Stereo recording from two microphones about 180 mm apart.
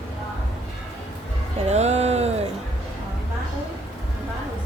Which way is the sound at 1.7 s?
40° right (ahead or behind).